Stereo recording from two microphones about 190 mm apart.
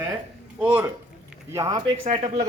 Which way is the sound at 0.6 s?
10° right (ahead or behind).